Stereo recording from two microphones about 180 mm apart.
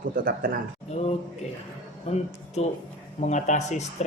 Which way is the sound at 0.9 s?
40° left (ahead or behind).